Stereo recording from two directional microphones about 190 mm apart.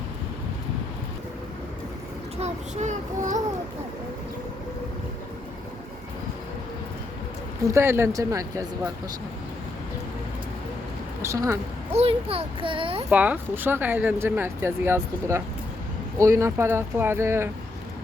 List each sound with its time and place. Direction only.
2.4 s a child's voice: 40° right (ahead or behind)
7.6 s speech: 15° right (ahead or behind)
11.2 s speech: 15° right (ahead or behind)
11.9 s a child's voice: 30° right (ahead or behind)
13.1 s speech: 10° right (ahead or behind)